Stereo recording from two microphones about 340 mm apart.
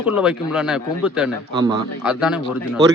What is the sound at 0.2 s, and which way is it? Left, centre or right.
Speech, centre.